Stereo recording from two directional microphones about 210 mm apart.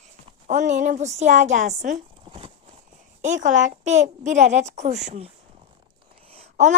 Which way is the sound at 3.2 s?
35° right (ahead or behind).